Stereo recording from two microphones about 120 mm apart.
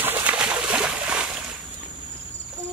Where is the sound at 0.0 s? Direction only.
15° right (ahead or behind).